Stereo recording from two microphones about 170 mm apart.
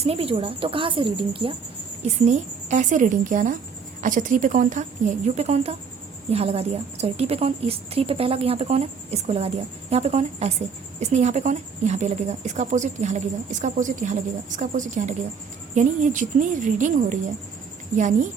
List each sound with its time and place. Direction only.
0.0 s a woman's voice: 35° right (ahead or behind)
2.0 s a woman's voice: 40° right (ahead or behind)